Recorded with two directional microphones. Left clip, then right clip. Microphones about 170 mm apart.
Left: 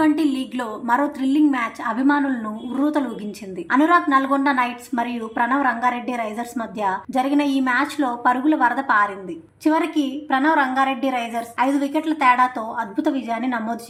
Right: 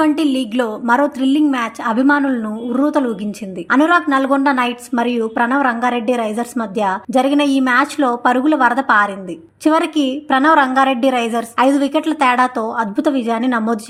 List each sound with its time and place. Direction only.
0.0 s a woman's voice: 35° right (ahead or behind)